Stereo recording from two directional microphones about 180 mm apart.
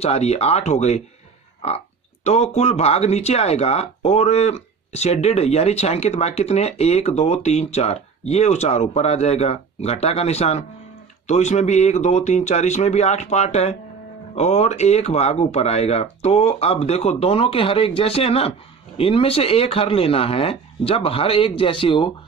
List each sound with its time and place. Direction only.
0.0 s speech: 35° left (ahead or behind)
2.2 s speech: 40° left (ahead or behind)